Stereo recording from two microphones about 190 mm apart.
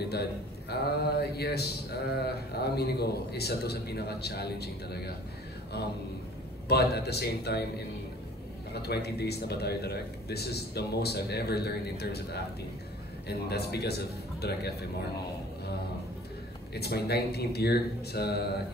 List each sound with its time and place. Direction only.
0.0 s speech: 60° left (ahead or behind)
6.7 s speech: 60° left (ahead or behind)
8.7 s speech: 60° left (ahead or behind)
16.7 s speech: 60° left (ahead or behind)